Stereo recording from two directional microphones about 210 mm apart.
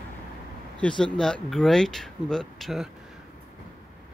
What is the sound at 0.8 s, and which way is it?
Speech, 5° left (ahead or behind).